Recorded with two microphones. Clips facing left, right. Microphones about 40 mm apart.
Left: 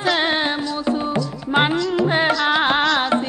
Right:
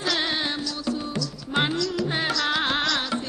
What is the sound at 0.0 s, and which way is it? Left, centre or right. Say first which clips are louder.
Music: left 7 dB; left.